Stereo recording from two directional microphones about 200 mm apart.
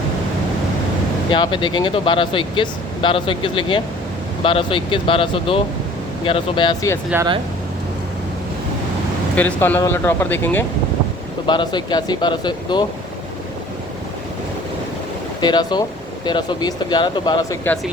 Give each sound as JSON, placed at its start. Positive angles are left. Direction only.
{"t": 1.3, "sound": "speech", "side_deg": 25}
{"t": 9.3, "sound": "speech", "side_deg": 10}
{"t": 11.4, "sound": "speech", "side_deg": 20}
{"t": 15.4, "sound": "speech", "side_deg": 20}